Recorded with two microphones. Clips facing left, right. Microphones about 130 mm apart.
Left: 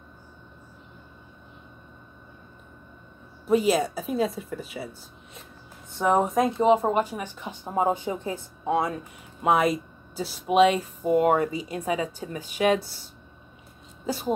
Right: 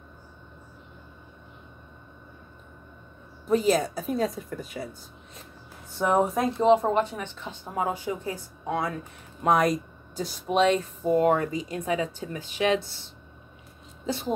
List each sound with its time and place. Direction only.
3.4 s speech: 5° left (ahead or behind)
5.9 s a woman's voice: centre (ahead or behind); by 9.0 s 20° left (ahead or behind)
9.4 s speech: 5° left (ahead or behind)